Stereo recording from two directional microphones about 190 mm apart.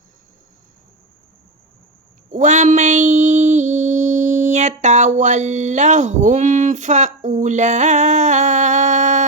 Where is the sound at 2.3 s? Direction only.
40° right (ahead or behind).